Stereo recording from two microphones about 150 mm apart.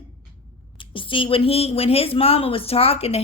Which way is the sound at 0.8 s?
35° left (ahead or behind).